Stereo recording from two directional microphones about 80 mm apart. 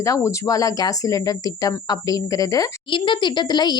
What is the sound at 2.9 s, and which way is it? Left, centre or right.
Speech, left.